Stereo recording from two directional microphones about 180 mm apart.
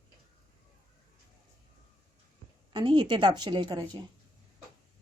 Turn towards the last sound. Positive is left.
turn(degrees=-20)  # may be behind; listen again after turning